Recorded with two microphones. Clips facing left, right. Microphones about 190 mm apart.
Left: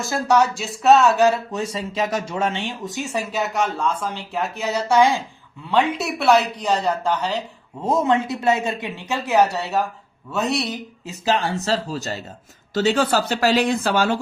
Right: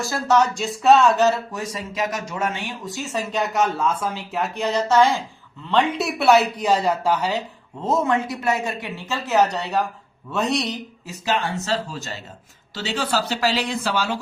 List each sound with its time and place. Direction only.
0.0 s speech: 15° left (ahead or behind)
1.5 s speech: 30° left (ahead or behind); by 3.4 s 10° left (ahead or behind)
3.4 s speech: centre (ahead or behind)
7.9 s speech: 25° left (ahead or behind); by 10.8 s 5° left (ahead or behind)
11.0 s speech: 30° left (ahead or behind); by 14.2 s 50° left (ahead or behind)